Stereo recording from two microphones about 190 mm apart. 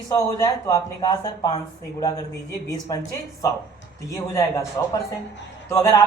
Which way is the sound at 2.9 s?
20° left (ahead or behind).